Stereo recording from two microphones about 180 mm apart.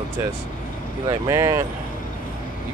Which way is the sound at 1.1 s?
15° right (ahead or behind).